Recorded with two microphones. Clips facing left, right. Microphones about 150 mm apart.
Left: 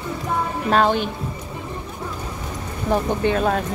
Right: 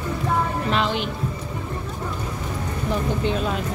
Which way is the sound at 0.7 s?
50° left (ahead or behind).